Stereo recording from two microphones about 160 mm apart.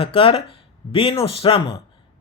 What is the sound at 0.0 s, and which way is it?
Speech, 35° left (ahead or behind).